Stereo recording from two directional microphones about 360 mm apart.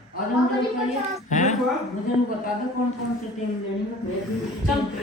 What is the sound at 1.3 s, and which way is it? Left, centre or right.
Speech, centre.